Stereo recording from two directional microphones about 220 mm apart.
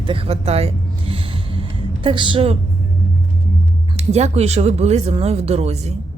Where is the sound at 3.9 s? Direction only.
30° right (ahead or behind).